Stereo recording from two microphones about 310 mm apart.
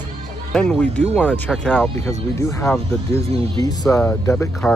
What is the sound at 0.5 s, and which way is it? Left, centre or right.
Speech, centre.